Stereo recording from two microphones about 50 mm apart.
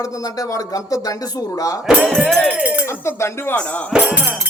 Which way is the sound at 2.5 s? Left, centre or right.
Right.